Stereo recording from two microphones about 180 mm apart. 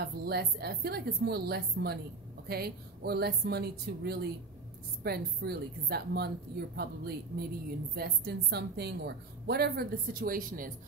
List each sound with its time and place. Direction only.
0.0 s a woman's voice: 60° right (ahead or behind)